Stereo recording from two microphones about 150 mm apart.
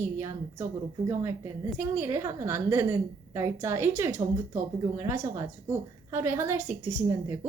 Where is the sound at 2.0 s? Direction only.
15° right (ahead or behind).